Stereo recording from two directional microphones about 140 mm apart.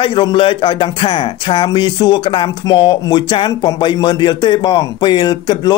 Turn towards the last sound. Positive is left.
turn(degrees=30)  # may be behind; listen again after turning